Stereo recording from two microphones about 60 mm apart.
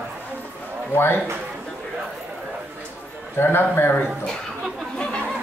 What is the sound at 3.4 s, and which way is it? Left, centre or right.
Speech, left.